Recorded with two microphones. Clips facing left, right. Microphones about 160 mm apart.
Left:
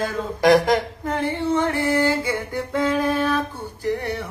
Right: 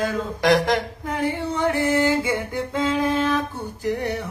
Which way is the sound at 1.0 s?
15° right (ahead or behind).